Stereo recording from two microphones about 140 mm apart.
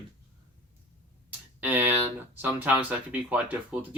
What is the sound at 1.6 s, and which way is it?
Speech, 15° right (ahead or behind).